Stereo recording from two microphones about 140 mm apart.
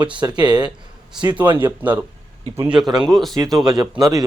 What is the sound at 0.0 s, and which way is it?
Speech, 30° right (ahead or behind).